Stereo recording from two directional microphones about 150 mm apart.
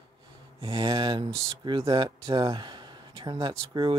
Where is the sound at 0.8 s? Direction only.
25° right (ahead or behind).